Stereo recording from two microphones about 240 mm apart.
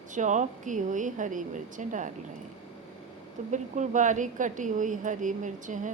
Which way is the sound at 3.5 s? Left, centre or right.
Right.